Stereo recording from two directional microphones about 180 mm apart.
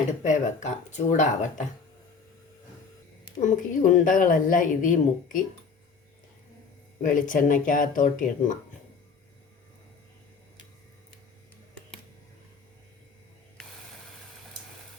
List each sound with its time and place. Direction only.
0.2 s speech: 40° left (ahead or behind)
3.4 s speech: 45° left (ahead or behind)
7.0 s speech: 45° left (ahead or behind)